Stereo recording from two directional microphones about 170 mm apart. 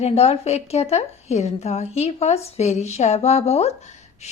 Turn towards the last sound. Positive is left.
turn(degrees=40)  # may be behind; listen again after turning